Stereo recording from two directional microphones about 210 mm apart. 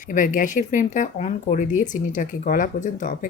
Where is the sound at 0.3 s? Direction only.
35° left (ahead or behind).